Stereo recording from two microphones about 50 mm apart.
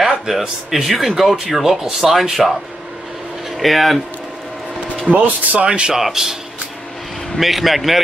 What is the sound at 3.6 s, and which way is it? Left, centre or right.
Speech, centre.